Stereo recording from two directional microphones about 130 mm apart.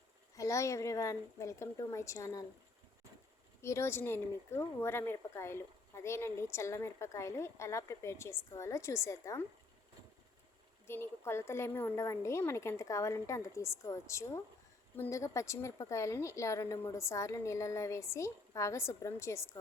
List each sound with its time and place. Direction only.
0.3 s a woman's voice: 25° left (ahead or behind)
3.6 s a woman's voice: 20° left (ahead or behind)
10.8 s a woman's voice: 20° left (ahead or behind)